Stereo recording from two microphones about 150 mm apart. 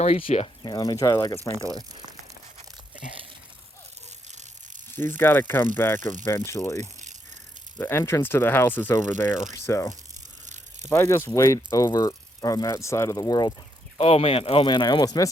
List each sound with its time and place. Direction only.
0.0 s speech: 40° left (ahead or behind)
1.5 s speech: 25° right (ahead or behind)
4.9 s speech: 15° left (ahead or behind)
6.0 s speech: 55° right (ahead or behind)
6.2 s speech: 20° left (ahead or behind)
10.9 s speech: 20° left (ahead or behind)
14.0 s speech: 40° left (ahead or behind); by 15.3 s 25° left (ahead or behind)